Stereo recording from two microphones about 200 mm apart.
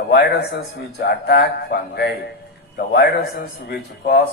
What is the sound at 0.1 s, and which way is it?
A man's voice, 55° left (ahead or behind).